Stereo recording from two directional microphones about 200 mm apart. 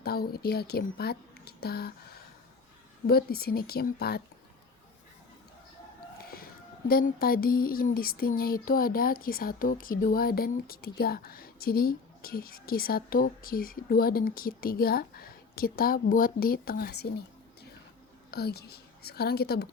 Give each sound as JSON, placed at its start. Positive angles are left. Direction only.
{"t": 0.0, "sound": "speech", "side_deg": 50}
{"t": 3.1, "sound": "speech", "side_deg": 50}
{"t": 6.1, "sound": "a woman's voice", "side_deg": 50}